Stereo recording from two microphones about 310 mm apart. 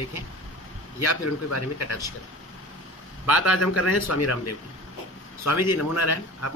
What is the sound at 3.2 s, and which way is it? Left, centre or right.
A man's voice, left.